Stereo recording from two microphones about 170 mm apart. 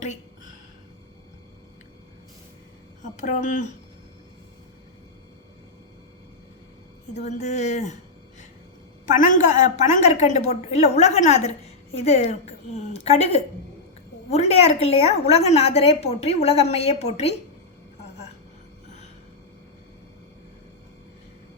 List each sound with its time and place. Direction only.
0.0 s a sound: 45° left (ahead or behind)
3.0 s a woman's voice: 45° left (ahead or behind)
7.1 s a woman's voice: 45° left (ahead or behind)
9.0 s a woman's voice: 45° left (ahead or behind)